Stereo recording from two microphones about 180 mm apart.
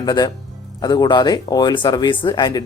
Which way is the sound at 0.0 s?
20° left (ahead or behind).